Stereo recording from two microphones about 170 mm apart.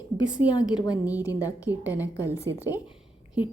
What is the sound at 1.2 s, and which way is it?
Speech, 20° left (ahead or behind).